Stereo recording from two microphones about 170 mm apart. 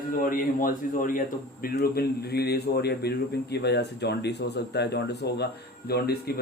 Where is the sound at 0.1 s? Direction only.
55° left (ahead or behind).